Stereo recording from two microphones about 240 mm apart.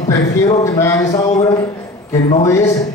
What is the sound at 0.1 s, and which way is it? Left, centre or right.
A man's voice, centre.